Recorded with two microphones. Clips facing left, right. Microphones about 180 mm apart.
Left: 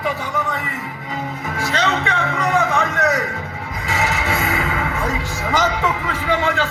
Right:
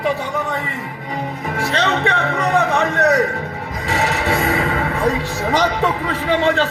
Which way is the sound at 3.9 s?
35° right (ahead or behind).